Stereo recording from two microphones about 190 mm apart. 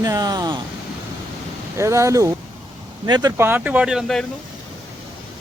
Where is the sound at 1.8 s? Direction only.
15° right (ahead or behind).